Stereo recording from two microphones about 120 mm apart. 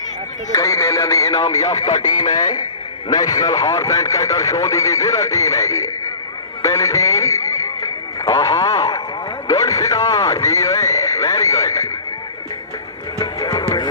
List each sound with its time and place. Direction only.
0.5 s speech: 25° left (ahead or behind)
1.9 s speech: 85° left
2.3 s a man's voice: 35° left (ahead or behind)
13.1 s music: 30° left (ahead or behind)